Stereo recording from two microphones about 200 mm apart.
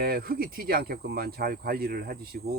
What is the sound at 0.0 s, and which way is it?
Speech, 50° right (ahead or behind).